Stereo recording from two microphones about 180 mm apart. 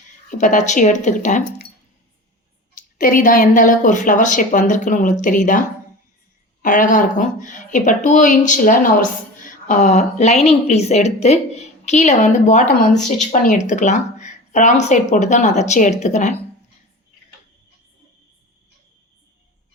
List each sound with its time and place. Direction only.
0.3 s speech: 45° left (ahead or behind)
2.7 s a woman's voice: 50° left (ahead or behind)